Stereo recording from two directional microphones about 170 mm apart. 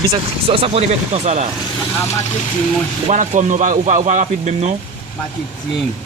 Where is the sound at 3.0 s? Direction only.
45° right (ahead or behind).